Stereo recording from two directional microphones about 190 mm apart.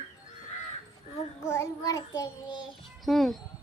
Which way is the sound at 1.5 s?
15° left (ahead or behind).